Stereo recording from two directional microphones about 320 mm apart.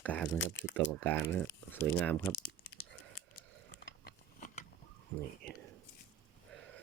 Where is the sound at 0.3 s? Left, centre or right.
Left.